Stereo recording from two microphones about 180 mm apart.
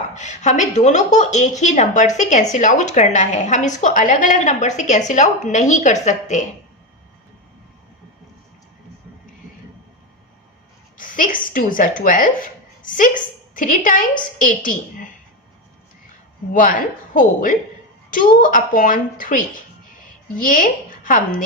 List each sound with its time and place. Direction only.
0.1 s a woman's voice: 40° left (ahead or behind)
10.9 s speech: 50° left (ahead or behind)
16.5 s a woman's voice: 50° left (ahead or behind)
20.4 s speech: 50° left (ahead or behind)